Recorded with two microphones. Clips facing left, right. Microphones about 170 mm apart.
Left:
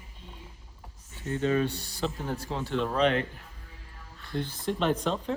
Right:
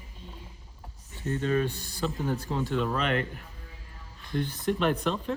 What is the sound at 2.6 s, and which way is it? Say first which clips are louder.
Speech: left 4 dB; 50° right (ahead or behind).